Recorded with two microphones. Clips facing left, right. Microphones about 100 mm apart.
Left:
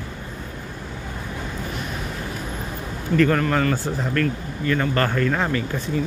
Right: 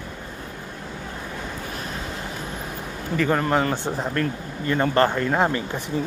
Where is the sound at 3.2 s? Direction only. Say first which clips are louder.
Left 2 dB; 15° right (ahead or behind).